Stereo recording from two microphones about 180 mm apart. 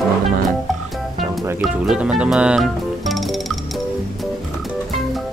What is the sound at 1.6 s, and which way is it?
Music, 5° right (ahead or behind).